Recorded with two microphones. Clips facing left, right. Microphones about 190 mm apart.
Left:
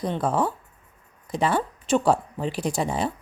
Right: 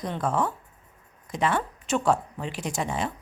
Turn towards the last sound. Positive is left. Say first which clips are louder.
# left 4 dB
turn(degrees=35)  # may be behind; listen again after turning